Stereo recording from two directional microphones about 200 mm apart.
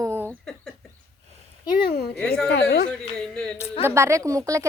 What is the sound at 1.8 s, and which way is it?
Speech, 50° left (ahead or behind).